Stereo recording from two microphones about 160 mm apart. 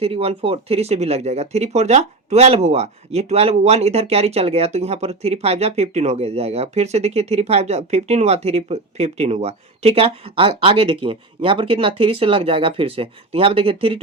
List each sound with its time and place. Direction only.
0.0 s speech: 35° right (ahead or behind)